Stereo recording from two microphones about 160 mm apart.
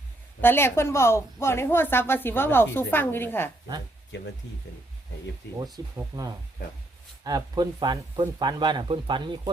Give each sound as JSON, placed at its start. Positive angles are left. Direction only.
{"t": 0.4, "sound": "a woman's voice", "side_deg": 15}
{"t": 4.1, "sound": "speech", "side_deg": 90}
{"t": 6.0, "sound": "speech", "side_deg": -20}